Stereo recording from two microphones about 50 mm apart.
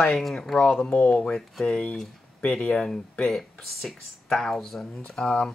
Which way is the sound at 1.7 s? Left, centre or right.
Left.